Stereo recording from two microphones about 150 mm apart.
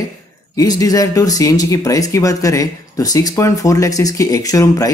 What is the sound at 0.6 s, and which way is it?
Speech, 25° left (ahead or behind).